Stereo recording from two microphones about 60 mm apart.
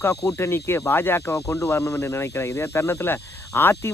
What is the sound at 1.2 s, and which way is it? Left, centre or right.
Speech, left.